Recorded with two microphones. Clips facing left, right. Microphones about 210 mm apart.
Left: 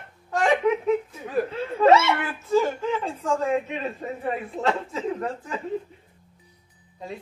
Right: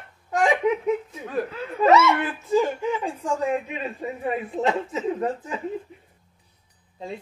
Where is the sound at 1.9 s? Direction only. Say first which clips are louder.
Right 1 dB; 30° left (ahead or behind).